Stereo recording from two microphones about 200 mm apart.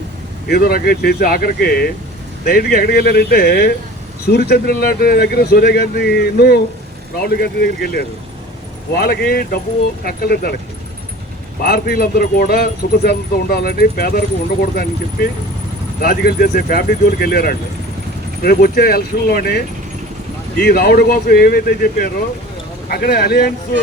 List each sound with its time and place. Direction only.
0.4 s speech: 50° left (ahead or behind)
11.6 s speech: 50° left (ahead or behind)